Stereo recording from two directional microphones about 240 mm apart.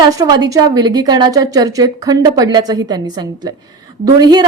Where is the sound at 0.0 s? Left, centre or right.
Centre.